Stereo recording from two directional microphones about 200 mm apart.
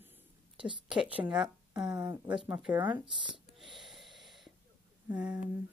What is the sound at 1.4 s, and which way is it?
Speech, 20° right (ahead or behind).